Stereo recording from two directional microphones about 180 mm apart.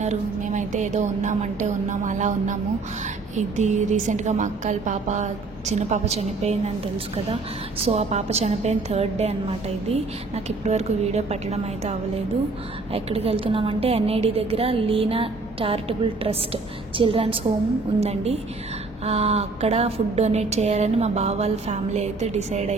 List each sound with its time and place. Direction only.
0.0 s a woman's voice: 40° right (ahead or behind)
7.8 s a woman's voice: 35° right (ahead or behind)